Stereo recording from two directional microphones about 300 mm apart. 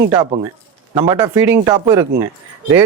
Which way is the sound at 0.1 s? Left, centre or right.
Centre.